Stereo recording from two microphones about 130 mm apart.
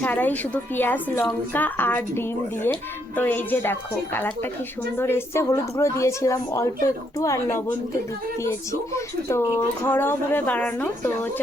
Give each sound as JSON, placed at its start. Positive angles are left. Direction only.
{"t": 0.0, "sound": "a woman's voice", "side_deg": 15}